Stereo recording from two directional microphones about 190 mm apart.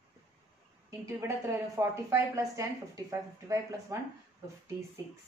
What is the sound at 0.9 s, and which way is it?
A woman's voice, 15° right (ahead or behind).